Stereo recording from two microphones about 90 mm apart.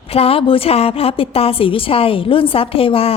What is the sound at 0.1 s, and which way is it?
A woman's voice, 90° left.